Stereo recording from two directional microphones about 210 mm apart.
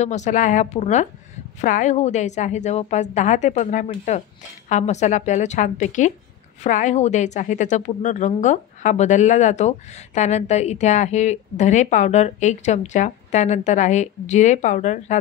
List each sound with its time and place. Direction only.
0.0 s a woman's voice: 35° left (ahead or behind)